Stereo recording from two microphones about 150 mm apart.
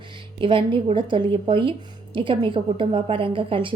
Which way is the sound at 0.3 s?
35° right (ahead or behind).